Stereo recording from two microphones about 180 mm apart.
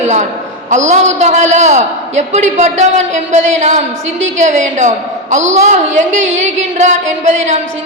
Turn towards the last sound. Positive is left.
turn(degrees=-40)  # may be behind; listen again after turning